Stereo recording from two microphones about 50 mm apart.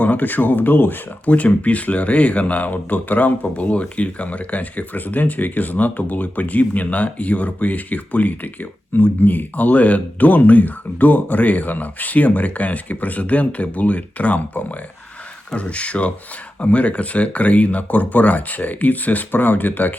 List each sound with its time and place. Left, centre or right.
0.0 s speech: left